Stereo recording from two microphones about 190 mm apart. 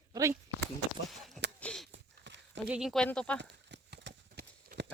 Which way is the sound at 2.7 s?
5° right (ahead or behind).